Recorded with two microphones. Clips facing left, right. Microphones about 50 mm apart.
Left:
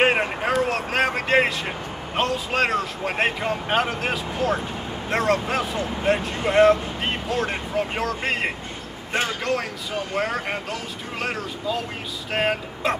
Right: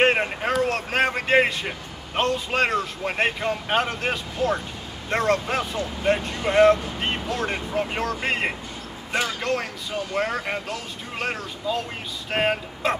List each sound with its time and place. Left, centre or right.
0.0 s speech: centre
5.8 s speech: left
6.0 s speech: centre